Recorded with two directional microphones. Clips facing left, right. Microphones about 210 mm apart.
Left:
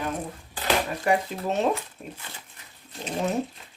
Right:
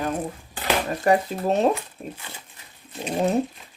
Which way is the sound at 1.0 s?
40° right (ahead or behind).